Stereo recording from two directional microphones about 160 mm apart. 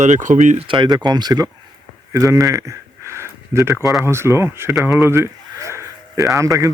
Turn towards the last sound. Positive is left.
turn(degrees=-20)  # may be behind; listen again after turning